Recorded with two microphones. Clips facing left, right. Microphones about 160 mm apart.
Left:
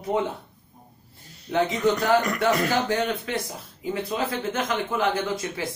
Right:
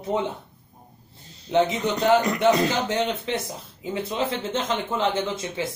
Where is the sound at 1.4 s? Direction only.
20° right (ahead or behind).